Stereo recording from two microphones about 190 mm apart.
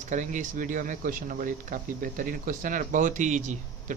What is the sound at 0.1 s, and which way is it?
Speech, 40° right (ahead or behind).